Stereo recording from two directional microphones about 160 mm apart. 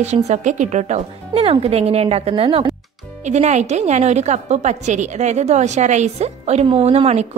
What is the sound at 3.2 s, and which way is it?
A woman's voice, 45° right (ahead or behind).